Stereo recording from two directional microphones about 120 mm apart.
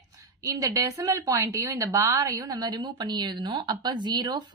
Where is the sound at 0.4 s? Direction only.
30° right (ahead or behind).